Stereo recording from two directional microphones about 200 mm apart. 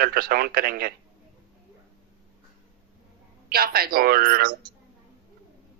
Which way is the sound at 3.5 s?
50° right (ahead or behind).